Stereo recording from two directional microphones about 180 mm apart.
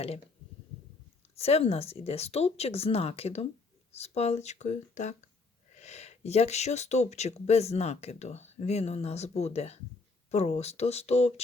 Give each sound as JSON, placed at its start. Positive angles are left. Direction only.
{"t": 1.4, "sound": "speech", "side_deg": 35}